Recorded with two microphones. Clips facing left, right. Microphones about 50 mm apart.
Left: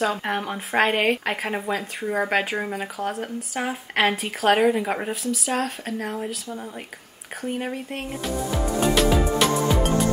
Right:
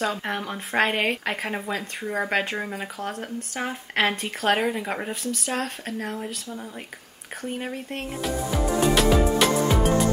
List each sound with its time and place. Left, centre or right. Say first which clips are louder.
0.0 s speech: left 3 dB; centre
7.4 s music: left 3 dB; centre